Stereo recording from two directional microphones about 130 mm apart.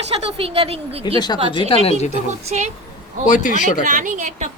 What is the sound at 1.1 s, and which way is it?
Speech, 35° left (ahead or behind).